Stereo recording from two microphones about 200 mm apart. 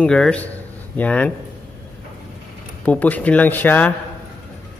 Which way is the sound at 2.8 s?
10° left (ahead or behind).